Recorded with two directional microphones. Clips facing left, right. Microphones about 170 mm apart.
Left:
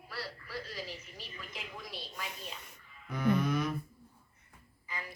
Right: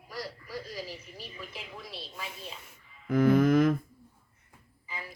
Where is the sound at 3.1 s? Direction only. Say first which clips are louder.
Right 8 dB; 90° right.